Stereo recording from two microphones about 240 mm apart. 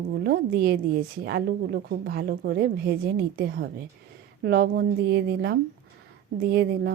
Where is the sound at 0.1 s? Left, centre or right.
Right.